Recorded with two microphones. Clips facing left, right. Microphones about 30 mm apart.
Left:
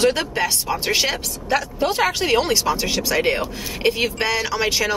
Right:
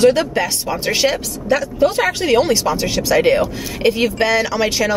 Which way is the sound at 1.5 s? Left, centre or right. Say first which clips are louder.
Right 5 dB; left.